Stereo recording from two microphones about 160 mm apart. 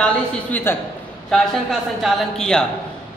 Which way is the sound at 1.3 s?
Centre (ahead or behind).